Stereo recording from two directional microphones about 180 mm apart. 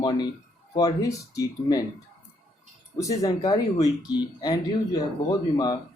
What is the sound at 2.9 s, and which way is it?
Speech, 20° left (ahead or behind).